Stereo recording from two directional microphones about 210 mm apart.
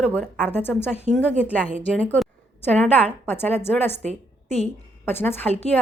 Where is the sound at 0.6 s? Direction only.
10° left (ahead or behind).